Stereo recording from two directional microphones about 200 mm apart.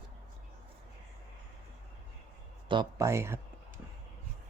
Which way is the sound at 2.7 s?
20° right (ahead or behind).